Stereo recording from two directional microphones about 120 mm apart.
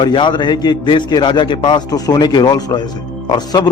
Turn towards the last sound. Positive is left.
turn(degrees=35)  # may be behind; listen again after turning